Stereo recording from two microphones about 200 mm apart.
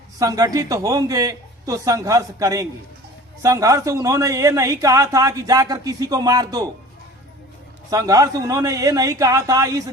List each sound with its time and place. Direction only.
0.2 s a man's voice: 15° right (ahead or behind)
7.9 s a man's voice: 15° right (ahead or behind)